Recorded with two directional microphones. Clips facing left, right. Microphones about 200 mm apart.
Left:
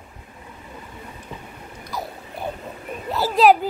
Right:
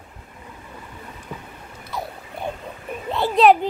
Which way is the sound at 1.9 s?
Centre (ahead or behind).